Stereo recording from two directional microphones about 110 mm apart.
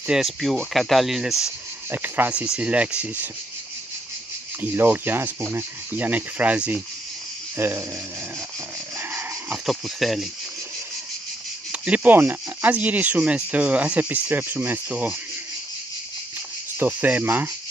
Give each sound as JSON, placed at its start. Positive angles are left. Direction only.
{"t": 0.0, "sound": "speech", "side_deg": -5}
{"t": 1.9, "sound": "speech", "side_deg": -20}
{"t": 4.6, "sound": "speech", "side_deg": -20}
{"t": 8.9, "sound": "a sound", "side_deg": -25}
{"t": 9.5, "sound": "speech", "side_deg": 0}
{"t": 11.7, "sound": "speech", "side_deg": -10}
{"t": 16.7, "sound": "speech", "side_deg": -15}